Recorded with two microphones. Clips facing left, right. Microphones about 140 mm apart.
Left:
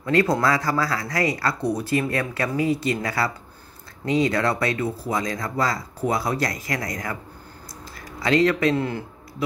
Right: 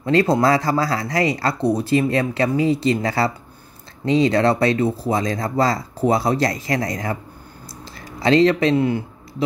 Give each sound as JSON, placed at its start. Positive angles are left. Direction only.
{"t": 0.0, "sound": "speech", "side_deg": -25}
{"t": 8.2, "sound": "speech", "side_deg": -25}